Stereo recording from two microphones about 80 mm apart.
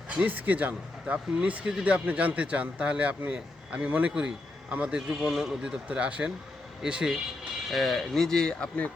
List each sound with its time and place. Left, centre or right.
0.2 s a man's voice: centre
7.7 s speech: centre